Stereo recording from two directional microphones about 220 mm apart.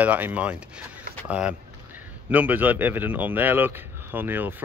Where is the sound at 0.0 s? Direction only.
5° right (ahead or behind).